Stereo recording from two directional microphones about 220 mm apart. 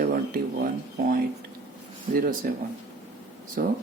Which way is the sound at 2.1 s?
40° right (ahead or behind).